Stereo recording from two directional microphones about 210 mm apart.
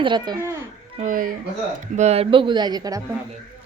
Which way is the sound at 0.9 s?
40° right (ahead or behind).